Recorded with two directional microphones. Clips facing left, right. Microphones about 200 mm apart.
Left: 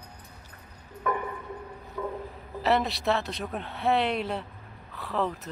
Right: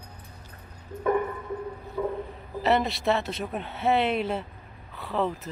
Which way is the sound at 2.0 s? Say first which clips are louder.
Right 4 dB; 20° right (ahead or behind).